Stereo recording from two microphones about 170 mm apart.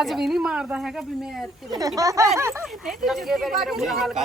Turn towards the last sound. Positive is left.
turn(degrees=0)  # may be behind; listen again after turning